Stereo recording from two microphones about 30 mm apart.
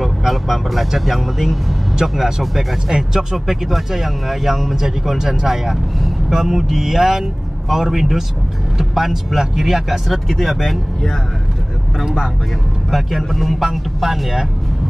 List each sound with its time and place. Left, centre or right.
0.0 s speech: centre
2.0 s speech: centre
5.2 s speech: right; by 10.8 s centre
12.9 s speech: centre
13.6 s speech: centre